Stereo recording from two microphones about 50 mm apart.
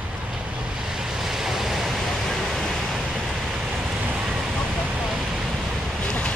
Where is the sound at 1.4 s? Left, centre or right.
Centre.